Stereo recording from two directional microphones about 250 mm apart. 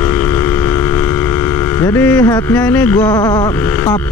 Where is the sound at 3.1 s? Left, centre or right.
Centre.